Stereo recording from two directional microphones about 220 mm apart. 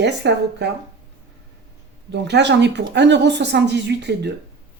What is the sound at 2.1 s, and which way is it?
A woman's voice, 50° right (ahead or behind).